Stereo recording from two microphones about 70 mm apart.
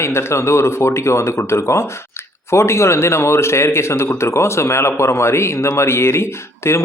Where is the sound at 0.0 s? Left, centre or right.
Left.